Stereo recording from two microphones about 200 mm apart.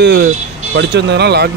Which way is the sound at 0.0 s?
55° right (ahead or behind).